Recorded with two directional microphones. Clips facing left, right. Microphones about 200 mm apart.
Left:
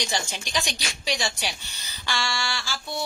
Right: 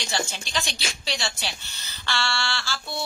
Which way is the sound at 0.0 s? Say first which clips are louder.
Even; 15° left (ahead or behind).